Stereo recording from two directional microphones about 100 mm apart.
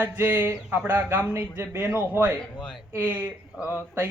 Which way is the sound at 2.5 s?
5° left (ahead or behind).